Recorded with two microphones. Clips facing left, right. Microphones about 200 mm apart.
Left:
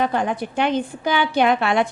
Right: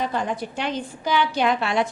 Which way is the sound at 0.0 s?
60° left (ahead or behind).